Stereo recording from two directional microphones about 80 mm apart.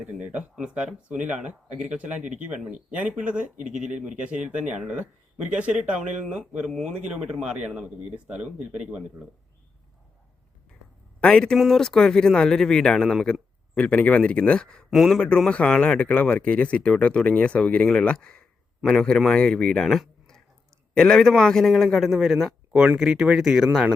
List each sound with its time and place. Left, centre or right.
0.0 s speech: centre
11.2 s speech: centre
11.5 s speech: centre
13.7 s speech: centre
15.4 s a man's voice: centre